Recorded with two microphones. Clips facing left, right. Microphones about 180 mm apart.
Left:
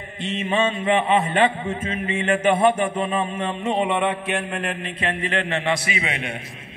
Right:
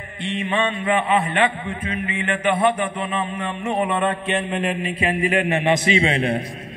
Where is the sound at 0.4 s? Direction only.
25° left (ahead or behind).